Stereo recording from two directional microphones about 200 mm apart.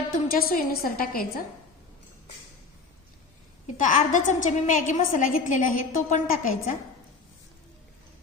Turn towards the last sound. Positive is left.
turn(degrees=40)  # may be behind; listen again after turning